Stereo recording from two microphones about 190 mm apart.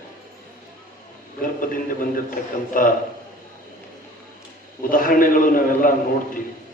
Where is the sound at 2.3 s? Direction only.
50° left (ahead or behind).